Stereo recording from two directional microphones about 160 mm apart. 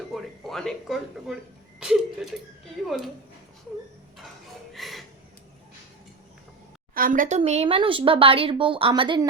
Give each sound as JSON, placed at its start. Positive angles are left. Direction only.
{"t": 0.1, "sound": "speech", "side_deg": 0}
{"t": 4.7, "sound": "music", "side_deg": 0}
{"t": 6.9, "sound": "speech", "side_deg": -60}